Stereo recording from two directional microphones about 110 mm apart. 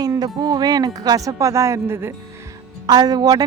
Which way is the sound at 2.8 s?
35° right (ahead or behind).